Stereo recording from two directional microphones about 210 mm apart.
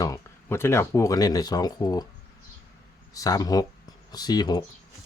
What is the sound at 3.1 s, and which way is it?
Speech, 15° left (ahead or behind).